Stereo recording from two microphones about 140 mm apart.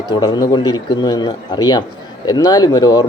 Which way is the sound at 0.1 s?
30° left (ahead or behind).